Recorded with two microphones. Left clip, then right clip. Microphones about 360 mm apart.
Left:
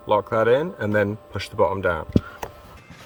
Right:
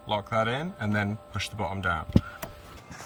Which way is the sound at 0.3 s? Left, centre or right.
Centre.